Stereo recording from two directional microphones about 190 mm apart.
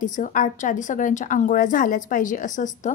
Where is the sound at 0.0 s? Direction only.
40° left (ahead or behind).